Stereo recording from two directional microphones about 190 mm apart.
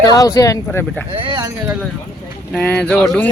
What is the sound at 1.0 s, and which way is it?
Speech, 30° right (ahead or behind).